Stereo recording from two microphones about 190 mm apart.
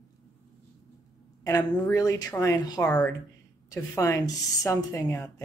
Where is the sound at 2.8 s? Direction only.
5° left (ahead or behind).